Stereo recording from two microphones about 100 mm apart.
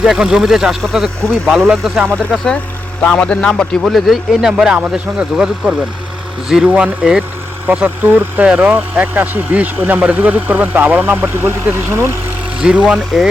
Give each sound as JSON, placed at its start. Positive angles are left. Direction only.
{"t": 0.0, "sound": "a man's voice", "side_deg": -5}
{"t": 2.1, "sound": "a man's voice", "side_deg": 5}
{"t": 12.6, "sound": "speech", "side_deg": -10}